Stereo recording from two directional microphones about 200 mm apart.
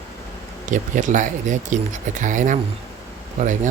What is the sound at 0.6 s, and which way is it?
Speech, 40° right (ahead or behind).